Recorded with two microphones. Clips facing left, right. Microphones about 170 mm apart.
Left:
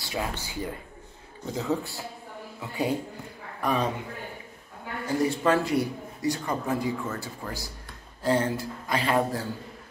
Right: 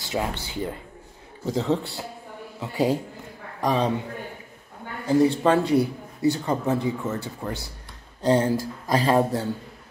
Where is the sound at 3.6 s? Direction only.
35° right (ahead or behind).